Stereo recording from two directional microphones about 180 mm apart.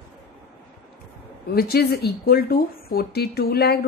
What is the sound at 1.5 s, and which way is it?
A woman's voice, 60° left (ahead or behind).